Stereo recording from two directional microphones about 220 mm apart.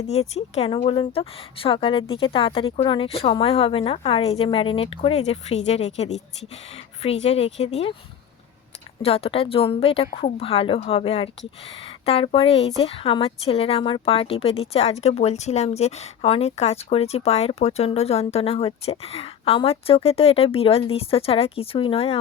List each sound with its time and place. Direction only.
0.1 s a woman's voice: 30° left (ahead or behind)
9.0 s a woman's voice: 25° left (ahead or behind)